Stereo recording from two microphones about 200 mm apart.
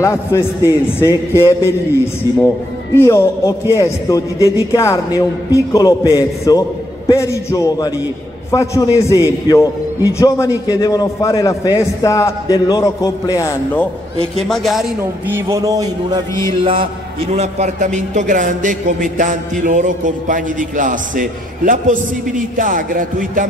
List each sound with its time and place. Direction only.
0.0 s a man's voice: 15° left (ahead or behind)
14.5 s a man's voice: centre (ahead or behind); by 23.4 s 40° right (ahead or behind)